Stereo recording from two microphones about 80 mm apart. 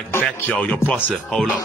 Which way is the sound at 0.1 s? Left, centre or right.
Left.